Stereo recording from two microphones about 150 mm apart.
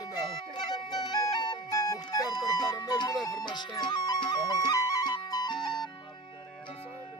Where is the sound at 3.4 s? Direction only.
25° left (ahead or behind).